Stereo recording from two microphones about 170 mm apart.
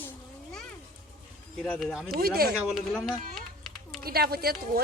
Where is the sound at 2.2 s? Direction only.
65° right (ahead or behind).